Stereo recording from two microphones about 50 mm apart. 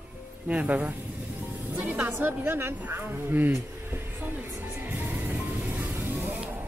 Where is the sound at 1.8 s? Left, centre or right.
Right.